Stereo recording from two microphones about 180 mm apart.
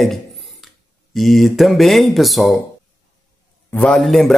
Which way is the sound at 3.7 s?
5° left (ahead or behind).